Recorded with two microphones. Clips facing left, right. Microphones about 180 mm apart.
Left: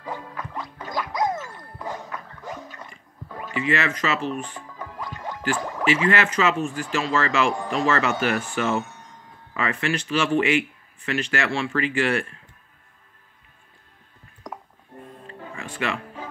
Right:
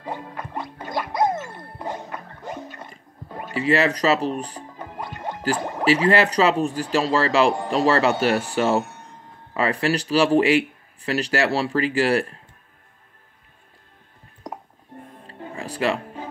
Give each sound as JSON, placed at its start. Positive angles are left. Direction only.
{"t": 1.5, "sound": "ding", "side_deg": -30}
{"t": 2.8, "sound": "music", "side_deg": -35}
{"t": 3.5, "sound": "speech", "side_deg": -35}
{"t": 15.2, "sound": "music", "side_deg": -35}